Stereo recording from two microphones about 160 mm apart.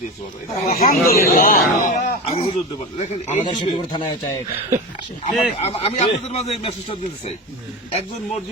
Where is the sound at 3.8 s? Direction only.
30° left (ahead or behind).